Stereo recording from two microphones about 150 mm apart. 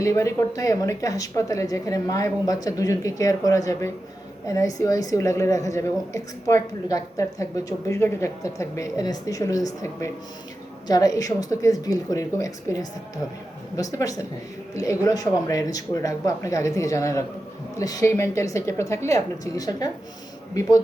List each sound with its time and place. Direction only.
0.0 s a woman's voice: 20° left (ahead or behind)